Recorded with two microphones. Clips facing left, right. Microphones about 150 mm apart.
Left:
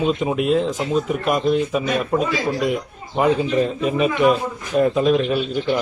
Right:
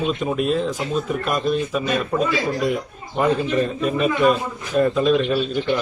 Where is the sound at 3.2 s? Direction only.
15° left (ahead or behind).